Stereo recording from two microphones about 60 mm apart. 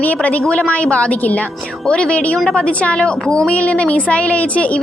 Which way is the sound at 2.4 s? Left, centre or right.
Centre.